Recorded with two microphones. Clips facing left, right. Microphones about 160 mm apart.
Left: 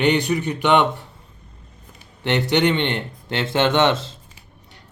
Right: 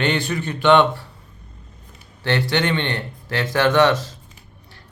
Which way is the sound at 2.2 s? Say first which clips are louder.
Left 2 dB; 20° left (ahead or behind).